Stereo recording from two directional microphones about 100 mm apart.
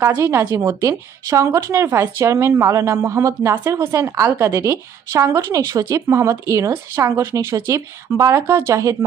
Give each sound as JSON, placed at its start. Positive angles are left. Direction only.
{"t": 0.2, "sound": "speech", "side_deg": -30}